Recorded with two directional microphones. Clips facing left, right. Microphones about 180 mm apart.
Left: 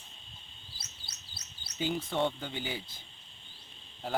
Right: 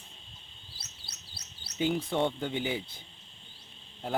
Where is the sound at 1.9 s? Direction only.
15° right (ahead or behind).